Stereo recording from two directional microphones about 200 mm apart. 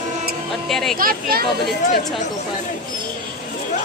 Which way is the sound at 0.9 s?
45° right (ahead or behind).